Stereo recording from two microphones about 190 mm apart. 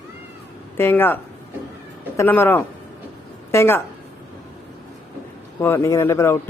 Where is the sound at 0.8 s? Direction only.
10° left (ahead or behind).